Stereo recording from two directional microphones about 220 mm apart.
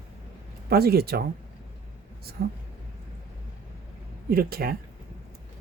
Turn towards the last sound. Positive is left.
turn(degrees=-45)  # may be behind; listen again after turning